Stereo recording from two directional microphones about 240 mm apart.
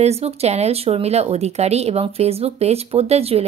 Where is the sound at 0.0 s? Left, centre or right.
Right.